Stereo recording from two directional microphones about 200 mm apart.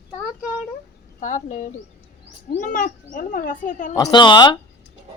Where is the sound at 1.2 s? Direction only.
40° left (ahead or behind).